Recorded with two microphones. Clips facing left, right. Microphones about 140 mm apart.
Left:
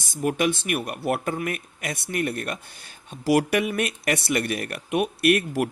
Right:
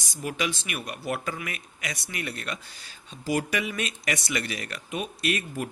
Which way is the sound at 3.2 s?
70° left (ahead or behind).